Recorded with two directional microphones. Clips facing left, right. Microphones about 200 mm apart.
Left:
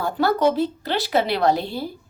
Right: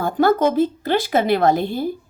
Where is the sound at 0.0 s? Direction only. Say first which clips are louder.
Right 3 dB; 50° right (ahead or behind).